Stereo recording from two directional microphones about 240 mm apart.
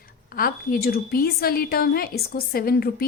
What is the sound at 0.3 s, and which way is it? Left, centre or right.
A woman's voice, left.